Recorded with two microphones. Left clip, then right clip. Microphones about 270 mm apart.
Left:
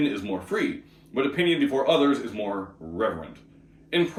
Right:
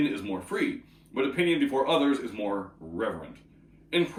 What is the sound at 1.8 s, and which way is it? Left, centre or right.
Speech, centre.